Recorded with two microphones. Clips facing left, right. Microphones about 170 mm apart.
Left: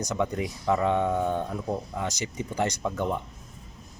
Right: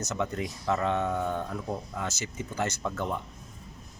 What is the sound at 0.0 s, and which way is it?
Speech, 15° left (ahead or behind).